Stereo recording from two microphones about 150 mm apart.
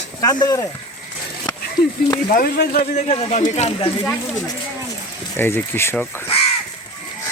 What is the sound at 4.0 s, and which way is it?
Speech, 20° left (ahead or behind).